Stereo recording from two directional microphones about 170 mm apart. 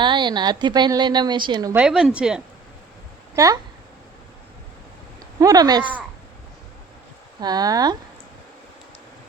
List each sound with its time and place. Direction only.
0.0 s a woman's voice: 25° right (ahead or behind)
1.7 s a woman's voice: 5° right (ahead or behind)
3.3 s a woman's voice: 20° right (ahead or behind)
5.4 s a woman's voice: 20° right (ahead or behind)
5.8 s speech: 10° right (ahead or behind)
7.4 s a woman's voice: 25° right (ahead or behind)